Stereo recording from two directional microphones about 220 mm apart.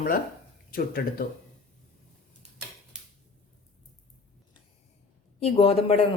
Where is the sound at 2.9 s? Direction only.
5° right (ahead or behind).